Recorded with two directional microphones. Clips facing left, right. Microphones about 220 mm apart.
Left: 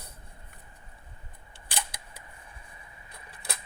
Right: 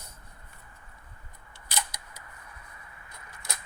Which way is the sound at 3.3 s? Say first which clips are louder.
Left 2 dB; 30° left (ahead or behind).